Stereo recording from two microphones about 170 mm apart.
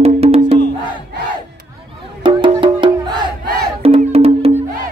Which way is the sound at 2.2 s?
30° right (ahead or behind).